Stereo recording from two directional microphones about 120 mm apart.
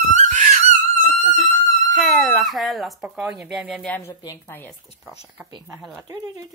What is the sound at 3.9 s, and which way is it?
Speech, 20° left (ahead or behind).